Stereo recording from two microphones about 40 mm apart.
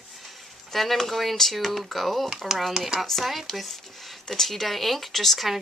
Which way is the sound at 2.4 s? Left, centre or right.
Centre.